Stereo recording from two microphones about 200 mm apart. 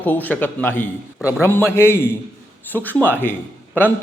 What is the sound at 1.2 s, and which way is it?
Speech, 5° right (ahead or behind).